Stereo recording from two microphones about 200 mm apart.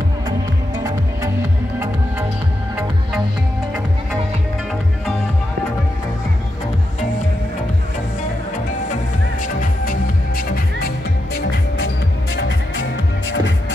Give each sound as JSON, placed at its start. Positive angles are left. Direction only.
{"t": 9.4, "sound": "music", "side_deg": 40}
{"t": 12.4, "sound": "music", "side_deg": 65}